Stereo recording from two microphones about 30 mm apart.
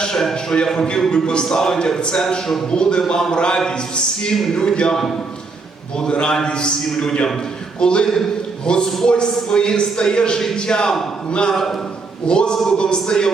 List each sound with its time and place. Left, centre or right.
0.5 s a man's voice: left
0.9 s a man's voice: left
2.6 s a man's voice: left
4.9 s a man's voice: centre
6.1 s a man's voice: left
11.5 s a man's voice: centre
12.2 s a man's voice: left